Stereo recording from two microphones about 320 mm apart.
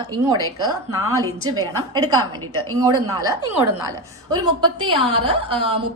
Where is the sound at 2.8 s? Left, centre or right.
Centre.